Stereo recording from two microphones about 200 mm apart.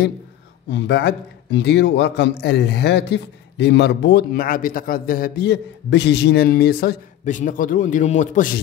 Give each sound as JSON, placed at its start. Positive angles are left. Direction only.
{"t": 0.7, "sound": "a man's voice", "side_deg": 60}